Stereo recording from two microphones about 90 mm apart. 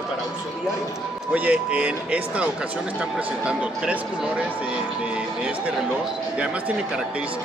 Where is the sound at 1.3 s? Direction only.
15° right (ahead or behind).